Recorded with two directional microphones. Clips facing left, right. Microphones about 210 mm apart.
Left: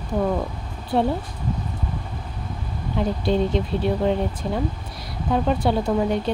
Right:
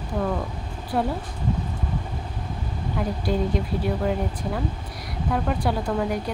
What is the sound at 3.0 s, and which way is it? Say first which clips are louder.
Speech: left 4 dB; 25° left (ahead or behind).